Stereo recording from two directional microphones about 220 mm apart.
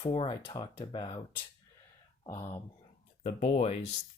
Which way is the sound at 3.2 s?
30° left (ahead or behind).